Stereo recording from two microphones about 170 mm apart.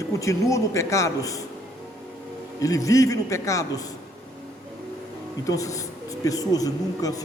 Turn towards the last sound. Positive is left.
turn(degrees=20)  # may be behind; listen again after turning